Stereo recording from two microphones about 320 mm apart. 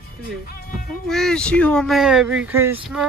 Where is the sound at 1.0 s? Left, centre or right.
Centre.